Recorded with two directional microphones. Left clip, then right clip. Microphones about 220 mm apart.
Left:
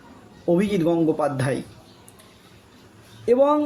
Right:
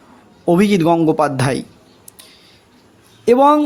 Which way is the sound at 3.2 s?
45° right (ahead or behind).